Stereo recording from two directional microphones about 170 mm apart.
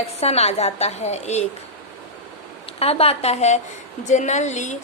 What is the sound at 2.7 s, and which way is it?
A woman's voice, 35° left (ahead or behind).